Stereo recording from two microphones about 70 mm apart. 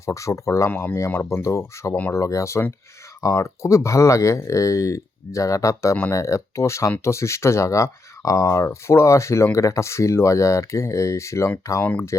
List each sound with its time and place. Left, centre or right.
0.0 s speech: left
11.8 s speech: left